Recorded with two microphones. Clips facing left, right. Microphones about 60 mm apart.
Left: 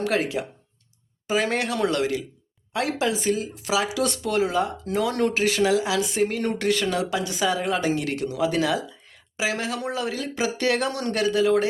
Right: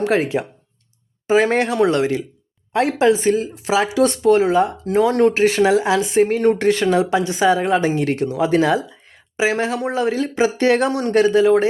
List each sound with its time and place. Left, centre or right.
0.0 s speech: right